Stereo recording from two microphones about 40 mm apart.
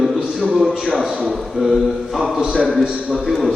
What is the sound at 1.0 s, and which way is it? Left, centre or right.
Speech, right.